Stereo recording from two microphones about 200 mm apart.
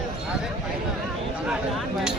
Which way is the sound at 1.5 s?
Centre (ahead or behind).